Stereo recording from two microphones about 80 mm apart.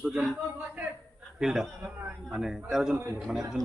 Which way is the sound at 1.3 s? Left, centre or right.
Centre.